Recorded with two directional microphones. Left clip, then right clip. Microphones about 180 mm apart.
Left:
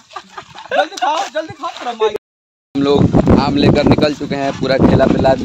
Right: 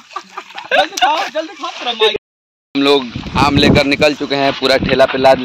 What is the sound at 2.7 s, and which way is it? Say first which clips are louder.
Speech: even; 5° right (ahead or behind).